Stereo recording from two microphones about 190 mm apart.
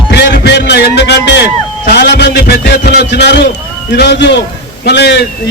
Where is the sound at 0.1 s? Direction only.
60° left (ahead or behind).